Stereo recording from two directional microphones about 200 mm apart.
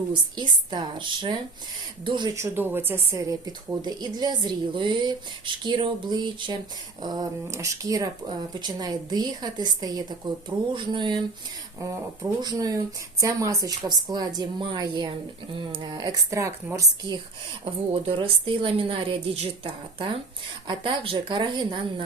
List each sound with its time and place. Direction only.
0.1 s a woman's voice: 20° right (ahead or behind)
17.9 s a woman's voice: 30° right (ahead or behind)